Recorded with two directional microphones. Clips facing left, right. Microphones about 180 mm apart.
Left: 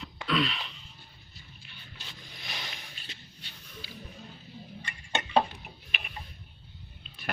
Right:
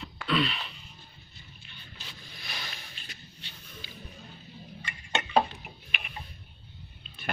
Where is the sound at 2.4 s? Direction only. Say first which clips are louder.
Even; 20° left (ahead or behind).